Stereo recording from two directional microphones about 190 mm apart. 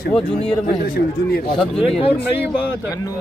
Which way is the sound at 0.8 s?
50° left (ahead or behind).